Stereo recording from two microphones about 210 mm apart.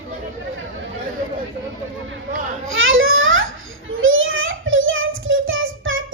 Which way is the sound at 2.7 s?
70° right (ahead or behind).